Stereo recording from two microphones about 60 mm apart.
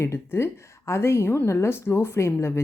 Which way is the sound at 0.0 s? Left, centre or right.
Left.